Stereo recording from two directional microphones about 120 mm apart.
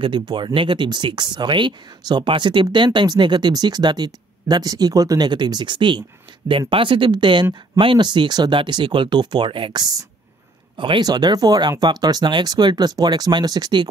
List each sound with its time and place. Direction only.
0.6 s speech: 40° right (ahead or behind)